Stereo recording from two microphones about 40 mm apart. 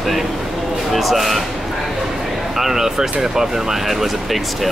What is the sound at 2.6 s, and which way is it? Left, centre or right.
Speech, centre.